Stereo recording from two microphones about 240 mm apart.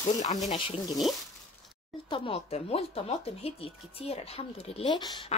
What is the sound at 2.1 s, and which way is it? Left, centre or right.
Speech, left.